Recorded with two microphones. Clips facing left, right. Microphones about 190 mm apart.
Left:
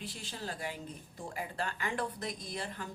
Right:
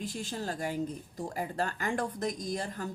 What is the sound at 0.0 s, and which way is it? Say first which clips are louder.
A woman's voice: right 7 dB; 45° right (ahead or behind).